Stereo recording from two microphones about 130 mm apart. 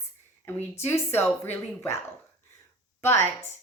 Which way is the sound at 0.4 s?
15° left (ahead or behind).